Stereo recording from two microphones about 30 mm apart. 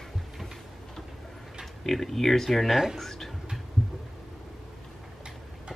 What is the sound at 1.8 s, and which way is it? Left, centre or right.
Speech, centre.